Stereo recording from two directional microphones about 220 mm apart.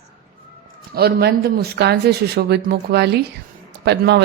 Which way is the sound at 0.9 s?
45° right (ahead or behind).